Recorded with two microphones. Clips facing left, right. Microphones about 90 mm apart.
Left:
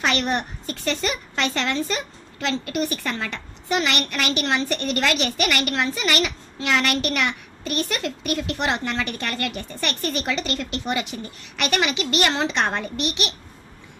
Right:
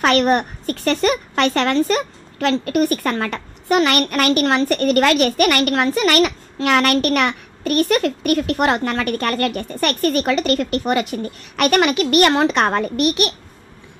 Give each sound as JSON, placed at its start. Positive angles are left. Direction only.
{"t": 0.0, "sound": "a woman's voice", "side_deg": -50}